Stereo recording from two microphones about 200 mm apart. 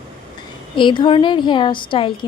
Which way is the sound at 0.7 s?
25° left (ahead or behind).